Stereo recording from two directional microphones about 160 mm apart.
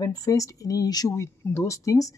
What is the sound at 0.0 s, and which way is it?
Speech, 25° left (ahead or behind).